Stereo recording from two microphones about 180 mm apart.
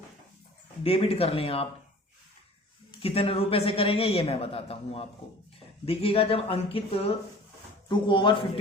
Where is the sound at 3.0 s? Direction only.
30° left (ahead or behind).